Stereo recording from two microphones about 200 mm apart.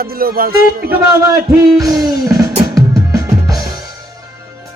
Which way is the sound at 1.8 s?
15° right (ahead or behind).